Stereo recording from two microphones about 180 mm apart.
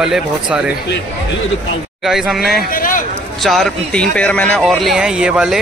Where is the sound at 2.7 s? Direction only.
50° left (ahead or behind).